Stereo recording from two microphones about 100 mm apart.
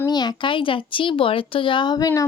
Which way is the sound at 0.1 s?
45° left (ahead or behind).